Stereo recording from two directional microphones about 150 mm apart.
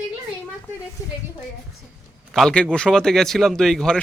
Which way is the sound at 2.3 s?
5° left (ahead or behind).